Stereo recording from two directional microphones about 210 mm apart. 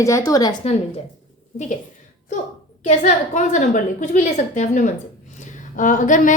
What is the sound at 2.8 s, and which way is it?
A woman's voice, 30° left (ahead or behind).